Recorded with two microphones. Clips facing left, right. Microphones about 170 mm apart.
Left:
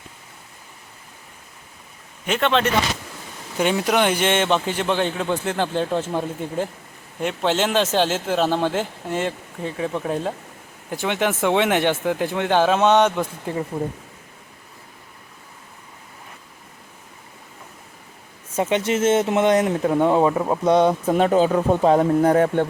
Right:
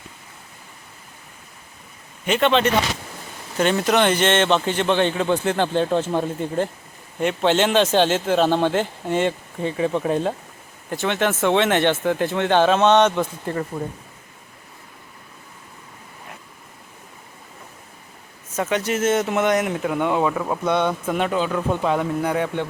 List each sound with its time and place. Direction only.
2.2 s a man's voice: centre (ahead or behind)
10.8 s a man's voice: 10° left (ahead or behind)
18.5 s speech: 25° left (ahead or behind); by 22.6 s 45° left (ahead or behind)